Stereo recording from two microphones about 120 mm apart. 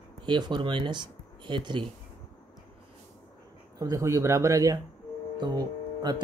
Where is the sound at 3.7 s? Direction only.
25° right (ahead or behind).